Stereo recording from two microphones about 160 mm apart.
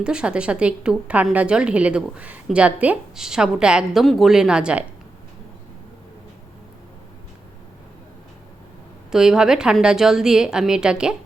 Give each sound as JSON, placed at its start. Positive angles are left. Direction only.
{"t": 0.0, "sound": "a woman's voice", "side_deg": -5}
{"t": 9.1, "sound": "a woman's voice", "side_deg": -5}